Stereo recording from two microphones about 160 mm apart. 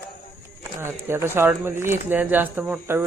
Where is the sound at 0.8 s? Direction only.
15° right (ahead or behind).